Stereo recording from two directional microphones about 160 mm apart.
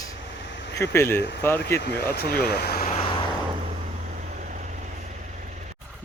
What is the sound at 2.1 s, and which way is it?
Speech, 80° left.